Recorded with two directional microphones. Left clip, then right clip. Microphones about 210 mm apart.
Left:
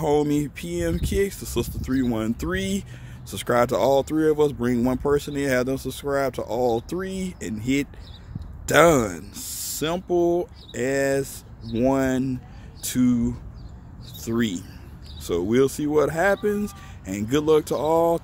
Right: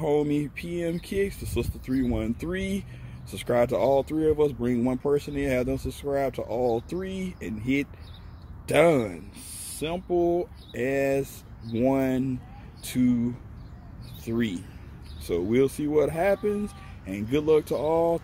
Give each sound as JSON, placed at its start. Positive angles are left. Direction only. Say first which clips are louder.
{"t": 0.0, "sound": "speech", "louder": "left 3 dB", "side_deg": 10}
{"t": 10.0, "sound": "speech", "louder": "left 2 dB", "side_deg": 10}